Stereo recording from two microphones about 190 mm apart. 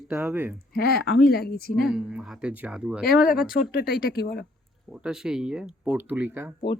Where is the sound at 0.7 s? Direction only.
55° left (ahead or behind).